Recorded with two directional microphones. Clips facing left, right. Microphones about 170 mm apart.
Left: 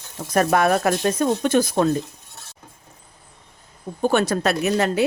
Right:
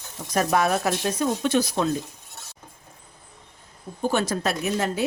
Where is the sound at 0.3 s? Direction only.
60° left (ahead or behind).